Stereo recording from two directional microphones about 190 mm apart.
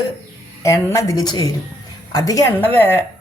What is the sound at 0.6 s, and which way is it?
Speech, 15° left (ahead or behind).